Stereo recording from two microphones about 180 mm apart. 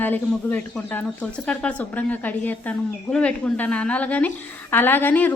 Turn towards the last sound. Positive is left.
turn(degrees=10)  # may be behind; listen again after turning